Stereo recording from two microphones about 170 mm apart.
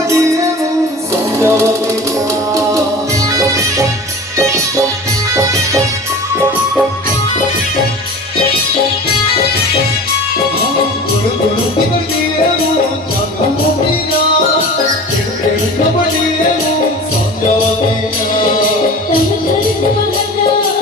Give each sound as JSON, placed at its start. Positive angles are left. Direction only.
{"t": 1.4, "sound": "music", "side_deg": -15}
{"t": 5.3, "sound": "music", "side_deg": -20}